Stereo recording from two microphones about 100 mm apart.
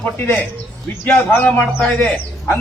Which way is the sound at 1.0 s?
20° left (ahead or behind).